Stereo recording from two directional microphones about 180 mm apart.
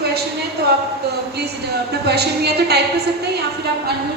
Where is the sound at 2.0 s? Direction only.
65° right (ahead or behind).